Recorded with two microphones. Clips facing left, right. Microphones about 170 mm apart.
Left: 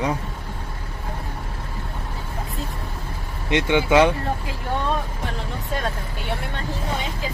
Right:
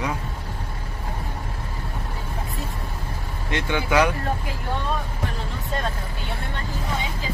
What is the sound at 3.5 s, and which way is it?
Speech, 20° left (ahead or behind).